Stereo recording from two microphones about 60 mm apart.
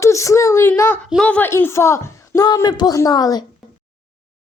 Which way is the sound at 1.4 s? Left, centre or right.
Left.